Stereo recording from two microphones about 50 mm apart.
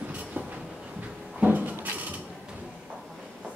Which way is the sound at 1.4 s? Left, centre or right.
Right.